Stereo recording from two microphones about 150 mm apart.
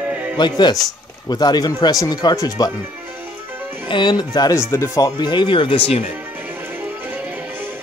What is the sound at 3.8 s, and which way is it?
Speech, 30° left (ahead or behind).